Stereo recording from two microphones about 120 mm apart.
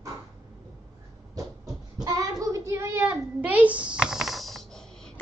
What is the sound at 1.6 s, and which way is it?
Child singing, 30° right (ahead or behind).